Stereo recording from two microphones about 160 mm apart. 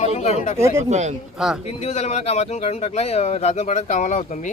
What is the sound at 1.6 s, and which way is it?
Speech, 40° left (ahead or behind).